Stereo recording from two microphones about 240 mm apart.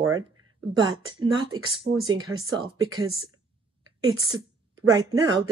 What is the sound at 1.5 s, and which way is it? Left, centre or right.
Speech, right.